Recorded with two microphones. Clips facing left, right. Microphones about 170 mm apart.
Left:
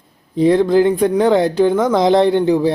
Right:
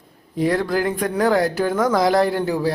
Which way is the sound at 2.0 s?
25° left (ahead or behind).